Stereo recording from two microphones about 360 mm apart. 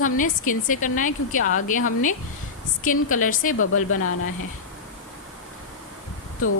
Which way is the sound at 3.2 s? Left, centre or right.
Left.